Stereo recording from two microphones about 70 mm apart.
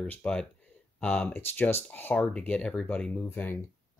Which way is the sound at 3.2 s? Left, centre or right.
Left.